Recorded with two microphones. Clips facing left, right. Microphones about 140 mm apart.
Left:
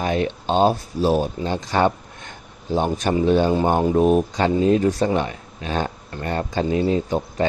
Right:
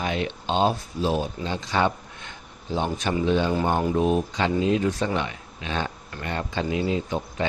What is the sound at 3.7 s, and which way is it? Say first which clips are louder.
Speech: left 5 dB; 25° left (ahead or behind).